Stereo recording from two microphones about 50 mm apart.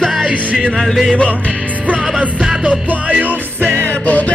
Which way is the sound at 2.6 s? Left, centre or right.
Right.